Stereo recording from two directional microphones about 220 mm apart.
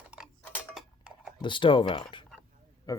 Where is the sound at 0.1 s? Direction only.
Centre (ahead or behind).